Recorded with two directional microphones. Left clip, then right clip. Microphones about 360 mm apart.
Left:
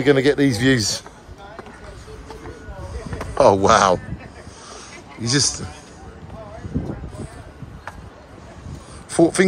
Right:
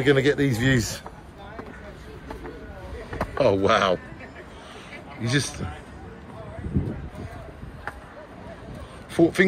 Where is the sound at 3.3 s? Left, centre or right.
Centre.